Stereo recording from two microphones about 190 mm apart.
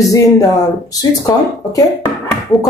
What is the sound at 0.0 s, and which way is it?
Speech, 15° left (ahead or behind).